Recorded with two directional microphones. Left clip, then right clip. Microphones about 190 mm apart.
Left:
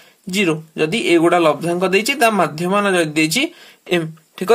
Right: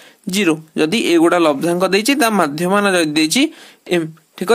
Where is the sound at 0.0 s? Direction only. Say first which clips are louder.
Right 1 dB; 50° right (ahead or behind).